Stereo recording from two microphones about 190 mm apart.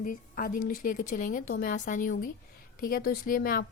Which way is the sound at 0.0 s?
45° left (ahead or behind).